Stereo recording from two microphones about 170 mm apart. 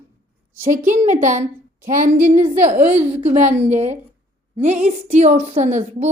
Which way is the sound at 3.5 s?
40° right (ahead or behind).